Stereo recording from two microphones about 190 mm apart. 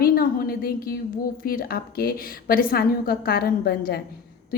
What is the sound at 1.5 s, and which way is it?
A woman's voice, 50° left (ahead or behind).